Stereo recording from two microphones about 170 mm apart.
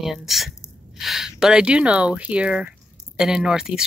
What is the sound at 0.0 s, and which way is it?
Speech, centre (ahead or behind).